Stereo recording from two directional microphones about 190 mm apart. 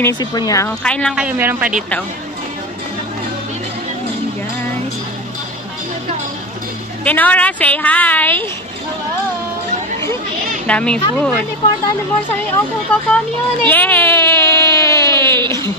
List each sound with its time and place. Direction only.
0.0 s a woman's voice: 20° left (ahead or behind)
0.8 s a woman's voice: 5° left (ahead or behind)
1.8 s a woman's voice: 5° left (ahead or behind)
7.1 s a woman's voice: 10° left (ahead or behind)
10.7 s a woman's voice: 5° left (ahead or behind)
12.9 s speech: 5° left (ahead or behind)